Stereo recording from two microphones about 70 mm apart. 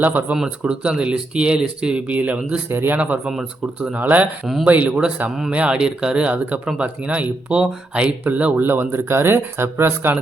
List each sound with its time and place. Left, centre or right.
0.0 s speech: right
0.6 s speech: centre
2.6 s speech: right
3.2 s speech: centre
3.9 s speech: right
5.3 s speech: centre; by 10.2 s right